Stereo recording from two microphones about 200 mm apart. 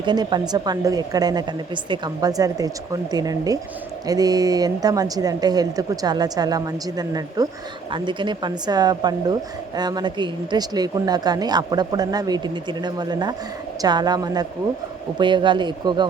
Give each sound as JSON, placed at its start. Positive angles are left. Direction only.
{"t": 0.0, "sound": "a woman's voice", "side_deg": -20}